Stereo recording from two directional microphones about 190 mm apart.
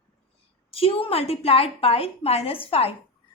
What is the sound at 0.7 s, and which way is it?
A woman's voice, 30° left (ahead or behind).